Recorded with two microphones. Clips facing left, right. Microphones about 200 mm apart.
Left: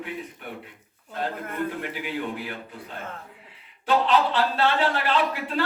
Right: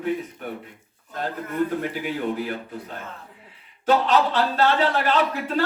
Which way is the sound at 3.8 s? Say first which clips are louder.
Right 2 dB; 45° right (ahead or behind).